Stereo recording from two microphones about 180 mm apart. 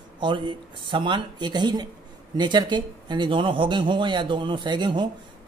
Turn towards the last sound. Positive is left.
turn(degrees=-25)  # may be behind; listen again after turning